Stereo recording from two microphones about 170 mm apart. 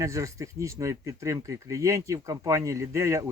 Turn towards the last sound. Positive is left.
turn(degrees=-15)  # may be behind; listen again after turning